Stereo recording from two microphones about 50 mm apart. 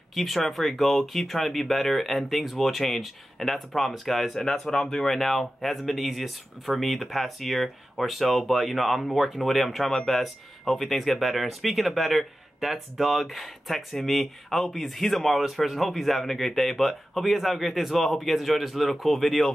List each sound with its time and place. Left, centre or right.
0.1 s speech: centre